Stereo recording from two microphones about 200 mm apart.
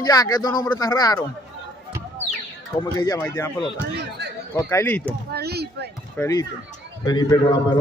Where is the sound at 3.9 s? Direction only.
55° right (ahead or behind).